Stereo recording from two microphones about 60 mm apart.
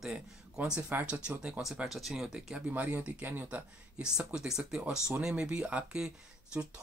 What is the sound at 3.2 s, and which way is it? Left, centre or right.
Speech, right.